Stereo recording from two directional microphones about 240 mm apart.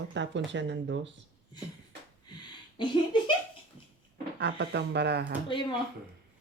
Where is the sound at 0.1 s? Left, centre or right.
Right.